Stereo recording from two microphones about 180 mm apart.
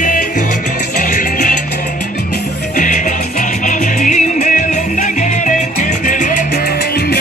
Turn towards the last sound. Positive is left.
turn(degrees=55)  # may be behind; listen again after turning